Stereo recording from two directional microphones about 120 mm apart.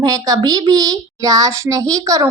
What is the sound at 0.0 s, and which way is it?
A woman's voice, 30° right (ahead or behind).